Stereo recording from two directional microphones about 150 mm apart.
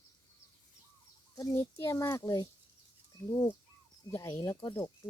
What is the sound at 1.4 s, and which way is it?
A child's voice, 20° left (ahead or behind).